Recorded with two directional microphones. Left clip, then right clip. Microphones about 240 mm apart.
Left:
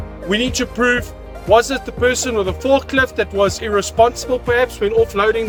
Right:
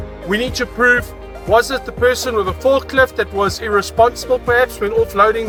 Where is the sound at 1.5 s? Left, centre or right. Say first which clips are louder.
Left 1 dB; centre.